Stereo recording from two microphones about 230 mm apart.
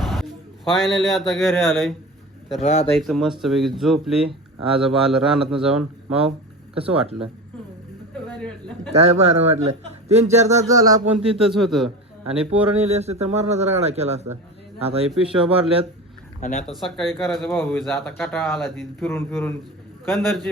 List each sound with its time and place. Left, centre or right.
0.0 s a man's voice: centre
2.6 s speech: left
2.9 s speech: centre
6.7 s a man's voice: right
8.1 s a sound: centre
8.9 s a man's voice: right
10.7 s speech: centre
11.2 s speech: centre
12.7 s a man's voice: right
15.1 s speech: centre
16.4 s speech: left
16.6 s speech: centre
19.0 s speech: centre